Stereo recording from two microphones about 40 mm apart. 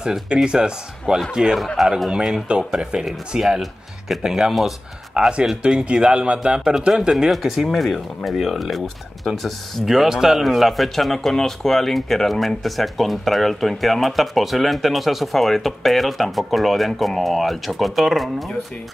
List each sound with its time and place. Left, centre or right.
0.0 s speech: centre
1.8 s speech: centre
2.7 s speech: centre
7.2 s speech: centre